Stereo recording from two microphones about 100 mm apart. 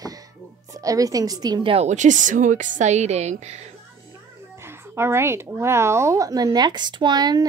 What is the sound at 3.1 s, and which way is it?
Speech, 90° right.